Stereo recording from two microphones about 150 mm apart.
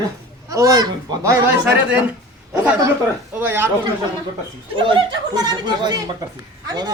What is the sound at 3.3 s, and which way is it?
Speech, 15° right (ahead or behind).